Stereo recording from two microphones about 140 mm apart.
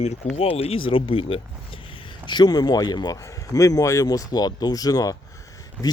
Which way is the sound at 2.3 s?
30° left (ahead or behind).